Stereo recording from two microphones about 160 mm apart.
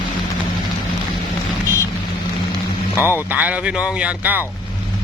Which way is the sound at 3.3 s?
10° right (ahead or behind).